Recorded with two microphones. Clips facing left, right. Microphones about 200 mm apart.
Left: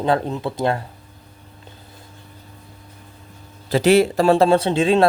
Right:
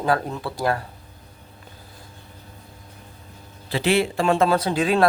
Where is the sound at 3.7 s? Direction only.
40° left (ahead or behind); by 5.1 s 25° left (ahead or behind).